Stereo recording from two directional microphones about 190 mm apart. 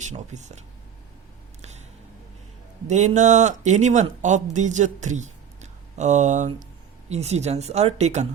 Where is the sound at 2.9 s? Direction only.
40° right (ahead or behind).